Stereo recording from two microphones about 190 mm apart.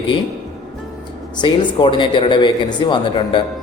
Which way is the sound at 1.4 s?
25° left (ahead or behind).